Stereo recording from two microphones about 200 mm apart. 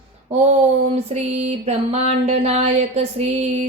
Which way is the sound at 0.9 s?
30° right (ahead or behind).